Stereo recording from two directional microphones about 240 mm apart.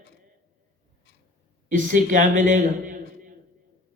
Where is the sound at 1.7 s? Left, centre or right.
Right.